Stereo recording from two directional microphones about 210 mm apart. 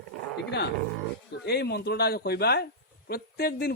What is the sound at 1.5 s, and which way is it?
Speech, 50° left (ahead or behind).